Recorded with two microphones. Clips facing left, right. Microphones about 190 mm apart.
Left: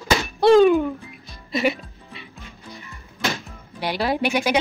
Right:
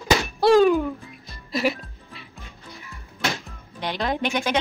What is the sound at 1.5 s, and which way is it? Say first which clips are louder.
Music: left 2 dB; centre (ahead or behind).